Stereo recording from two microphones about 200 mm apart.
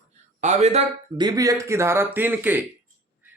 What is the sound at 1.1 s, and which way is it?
Speech, 20° right (ahead or behind).